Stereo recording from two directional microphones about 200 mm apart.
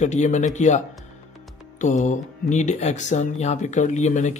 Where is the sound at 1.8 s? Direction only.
40° left (ahead or behind).